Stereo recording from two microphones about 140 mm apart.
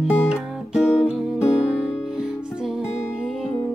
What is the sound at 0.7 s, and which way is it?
Music, 5° right (ahead or behind).